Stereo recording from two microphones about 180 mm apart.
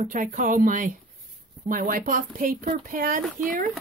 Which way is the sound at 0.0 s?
45° right (ahead or behind).